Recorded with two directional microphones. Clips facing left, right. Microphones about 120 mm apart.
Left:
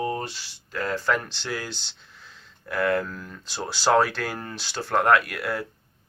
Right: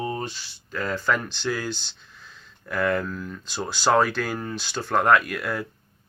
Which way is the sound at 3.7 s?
25° left (ahead or behind).